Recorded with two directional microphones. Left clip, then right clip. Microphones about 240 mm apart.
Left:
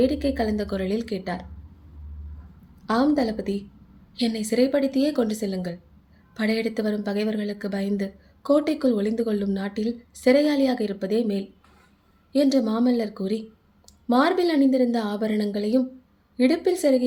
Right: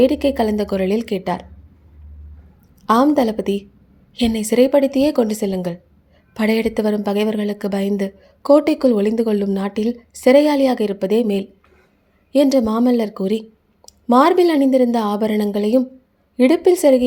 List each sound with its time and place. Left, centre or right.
0.0 s a woman's voice: right
2.8 s a woman's voice: right